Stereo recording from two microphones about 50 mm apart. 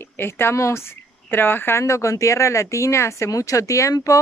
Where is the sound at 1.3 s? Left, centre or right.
Left.